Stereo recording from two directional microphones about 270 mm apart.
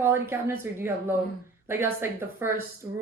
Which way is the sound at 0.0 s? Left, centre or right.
Centre.